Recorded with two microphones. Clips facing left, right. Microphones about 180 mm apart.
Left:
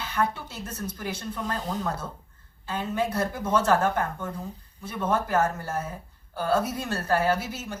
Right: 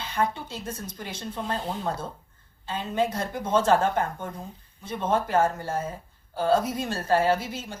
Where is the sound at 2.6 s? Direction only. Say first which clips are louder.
Right 1 dB; 25° right (ahead or behind).